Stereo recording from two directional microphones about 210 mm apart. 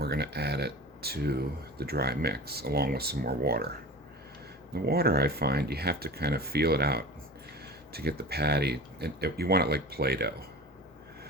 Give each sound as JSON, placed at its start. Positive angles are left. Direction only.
{"t": 0.0, "sound": "speech", "side_deg": -50}
{"t": 4.7, "sound": "speech", "side_deg": -45}